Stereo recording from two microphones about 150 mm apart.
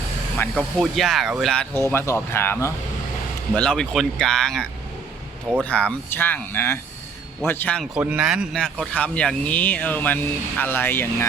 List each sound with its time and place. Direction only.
0.5 s speech: centre (ahead or behind)
1.7 s speech: 15° left (ahead or behind)
3.5 s speech: 5° left (ahead or behind)
7.9 s a man's voice: 10° right (ahead or behind)
8.5 s speech: 5° left (ahead or behind)